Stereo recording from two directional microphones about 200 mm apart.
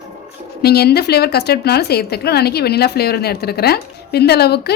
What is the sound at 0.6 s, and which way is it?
A woman's voice, 55° left (ahead or behind).